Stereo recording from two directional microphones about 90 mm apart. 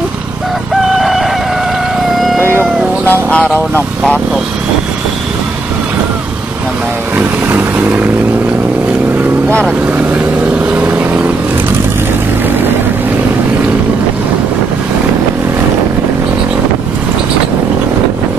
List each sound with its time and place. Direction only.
2.1 s a sound: centre (ahead or behind)
3.1 s speech: 15° left (ahead or behind)
7.2 s vehicle: 20° right (ahead or behind)
10.7 s vehicle: 15° right (ahead or behind)